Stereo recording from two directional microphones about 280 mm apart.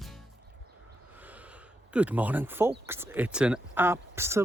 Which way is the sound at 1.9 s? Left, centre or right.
Centre.